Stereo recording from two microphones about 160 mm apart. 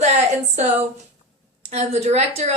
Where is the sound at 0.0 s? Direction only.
45° right (ahead or behind).